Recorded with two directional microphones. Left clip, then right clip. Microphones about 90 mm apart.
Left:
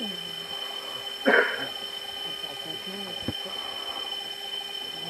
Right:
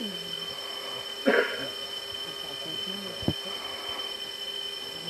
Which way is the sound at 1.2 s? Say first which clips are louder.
Left 3 dB; 35° right (ahead or behind).